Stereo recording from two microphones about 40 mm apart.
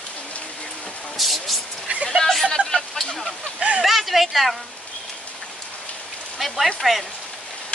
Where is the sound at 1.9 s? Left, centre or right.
Right.